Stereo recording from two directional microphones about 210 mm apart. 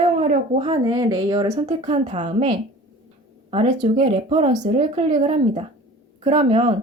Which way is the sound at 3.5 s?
30° right (ahead or behind).